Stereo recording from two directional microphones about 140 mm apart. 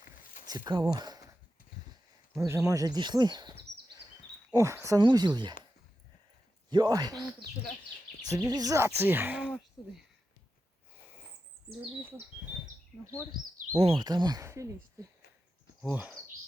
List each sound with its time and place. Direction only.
0.4 s speech: 30° right (ahead or behind)
2.4 s speech: 25° right (ahead or behind)
4.5 s speech: 20° right (ahead or behind)
6.7 s speech: 30° right (ahead or behind)
7.1 s speech: centre (ahead or behind)
8.2 s speech: 25° right (ahead or behind); by 10.0 s 10° right (ahead or behind)
13.8 s speech: 35° right (ahead or behind)
15.9 s speech: 10° right (ahead or behind)